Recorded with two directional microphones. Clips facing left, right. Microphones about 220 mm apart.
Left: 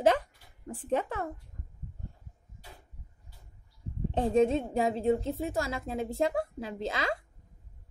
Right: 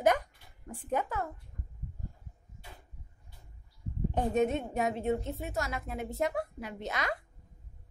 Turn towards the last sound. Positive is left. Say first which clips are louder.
# left 3 dB
turn(degrees=25)  # may be behind; listen again after turning